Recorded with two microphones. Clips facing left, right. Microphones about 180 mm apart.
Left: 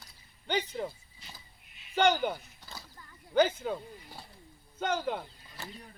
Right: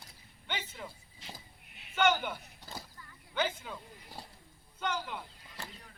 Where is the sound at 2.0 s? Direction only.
35° left (ahead or behind).